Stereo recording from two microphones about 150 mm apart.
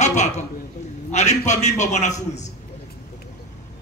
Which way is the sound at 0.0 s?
50° left (ahead or behind).